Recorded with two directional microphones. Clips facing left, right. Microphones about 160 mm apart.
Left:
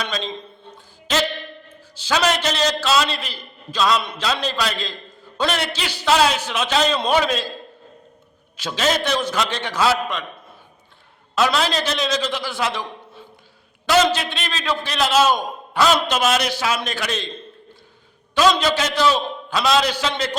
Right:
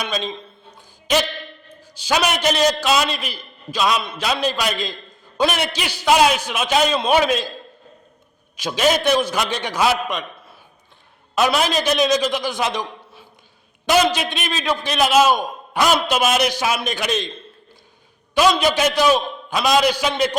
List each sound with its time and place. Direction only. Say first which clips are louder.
0.0 s a man's voice: right 1 dB; 15° right (ahead or behind)
8.5 s a man's voice: right 3 dB; 15° right (ahead or behind)
11.3 s a man's voice: right 1 dB; 15° right (ahead or behind)
18.3 s a man's voice: right 1 dB; 10° right (ahead or behind)